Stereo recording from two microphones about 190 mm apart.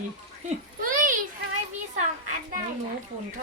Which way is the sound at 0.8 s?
45° right (ahead or behind).